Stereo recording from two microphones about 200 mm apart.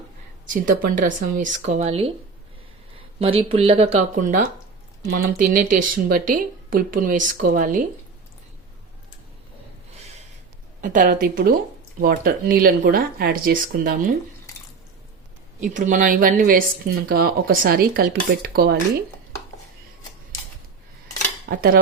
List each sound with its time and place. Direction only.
0.4 s speech: 40° right (ahead or behind)
3.2 s speech: 30° right (ahead or behind)
10.8 s speech: 40° right (ahead or behind)
15.6 s speech: 40° right (ahead or behind)
21.5 s speech: 50° right (ahead or behind)